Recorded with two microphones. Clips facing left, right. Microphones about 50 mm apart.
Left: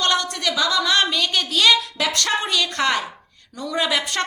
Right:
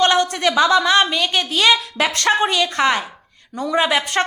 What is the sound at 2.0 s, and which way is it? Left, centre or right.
A woman's voice, right.